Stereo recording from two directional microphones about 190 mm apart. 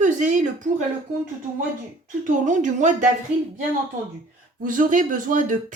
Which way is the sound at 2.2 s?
40° right (ahead or behind).